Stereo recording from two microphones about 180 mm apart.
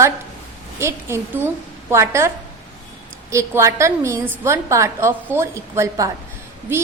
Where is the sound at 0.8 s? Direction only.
15° right (ahead or behind).